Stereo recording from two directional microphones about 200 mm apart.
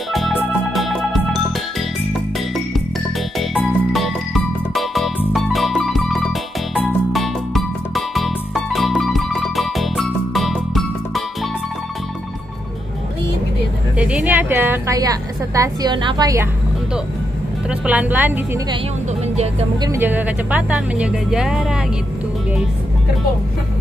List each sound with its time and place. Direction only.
0.1 s music: centre (ahead or behind)
3.3 s music: centre (ahead or behind)
13.9 s a woman's voice: 5° right (ahead or behind)
17.6 s speech: 5° right (ahead or behind)
19.8 s speech: 10° right (ahead or behind)